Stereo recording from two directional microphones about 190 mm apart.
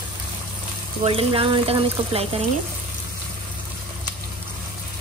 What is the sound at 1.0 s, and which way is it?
Speech, 30° right (ahead or behind).